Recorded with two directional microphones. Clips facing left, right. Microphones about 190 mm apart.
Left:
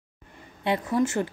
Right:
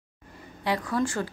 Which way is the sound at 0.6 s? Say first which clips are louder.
Left 3 dB; 25° left (ahead or behind).